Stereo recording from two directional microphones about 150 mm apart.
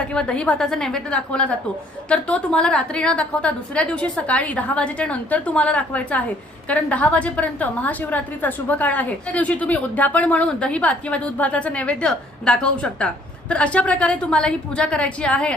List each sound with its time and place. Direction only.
0.1 s a woman's voice: 5° left (ahead or behind)